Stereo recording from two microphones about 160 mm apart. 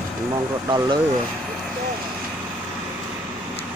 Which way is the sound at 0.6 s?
30° right (ahead or behind).